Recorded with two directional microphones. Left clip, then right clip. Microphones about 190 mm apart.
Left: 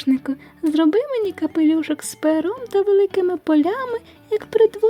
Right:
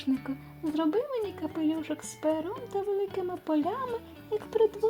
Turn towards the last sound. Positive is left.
turn(degrees=35)  # may be behind; listen again after turning